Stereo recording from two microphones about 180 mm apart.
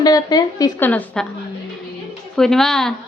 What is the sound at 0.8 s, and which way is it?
Speech, 10° left (ahead or behind).